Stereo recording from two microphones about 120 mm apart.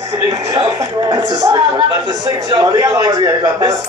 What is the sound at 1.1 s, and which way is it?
A man's voice, 35° right (ahead or behind).